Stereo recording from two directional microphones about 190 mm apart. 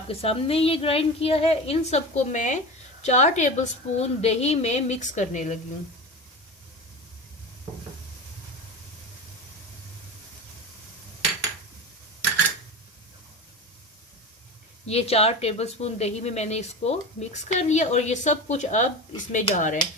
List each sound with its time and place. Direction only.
0.1 s a woman's voice: 30° left (ahead or behind)
14.8 s a woman's voice: 35° left (ahead or behind)